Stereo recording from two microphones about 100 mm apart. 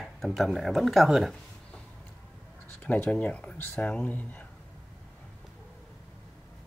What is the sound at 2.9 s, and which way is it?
Speech, 15° left (ahead or behind).